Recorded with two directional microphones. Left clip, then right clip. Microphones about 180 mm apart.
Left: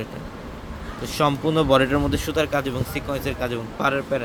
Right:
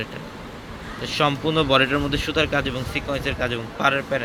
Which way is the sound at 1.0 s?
15° left (ahead or behind).